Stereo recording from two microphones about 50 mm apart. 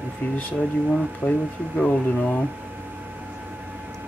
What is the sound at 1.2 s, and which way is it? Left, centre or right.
Speech, left.